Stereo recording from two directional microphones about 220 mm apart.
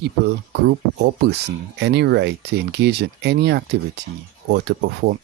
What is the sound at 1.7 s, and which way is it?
Speech, 50° right (ahead or behind).